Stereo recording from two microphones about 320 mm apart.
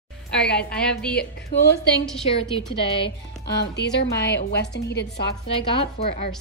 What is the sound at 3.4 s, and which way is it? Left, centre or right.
A woman's voice, left.